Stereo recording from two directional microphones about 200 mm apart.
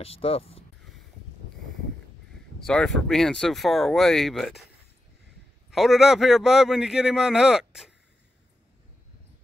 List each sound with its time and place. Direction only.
0.0 s speech: 30° left (ahead or behind)
2.6 s a man's voice: 5° left (ahead or behind)
5.7 s a man's voice: centre (ahead or behind)